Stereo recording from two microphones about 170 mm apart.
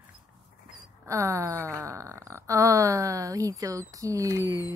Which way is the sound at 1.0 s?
20° right (ahead or behind).